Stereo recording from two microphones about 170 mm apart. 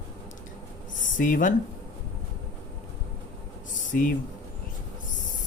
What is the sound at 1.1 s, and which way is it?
Speech, 50° left (ahead or behind).